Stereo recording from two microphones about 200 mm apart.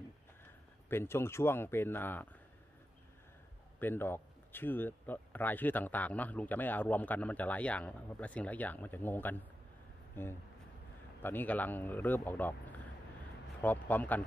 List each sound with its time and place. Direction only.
0.8 s speech: 10° left (ahead or behind)
3.8 s speech: 10° left (ahead or behind)